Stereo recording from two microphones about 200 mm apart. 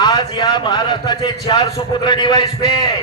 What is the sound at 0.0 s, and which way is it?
A man's voice, 20° left (ahead or behind).